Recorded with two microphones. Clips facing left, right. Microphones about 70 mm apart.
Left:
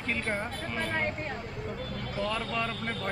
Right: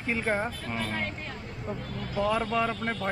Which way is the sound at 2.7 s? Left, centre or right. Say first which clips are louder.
Right 3 dB; right.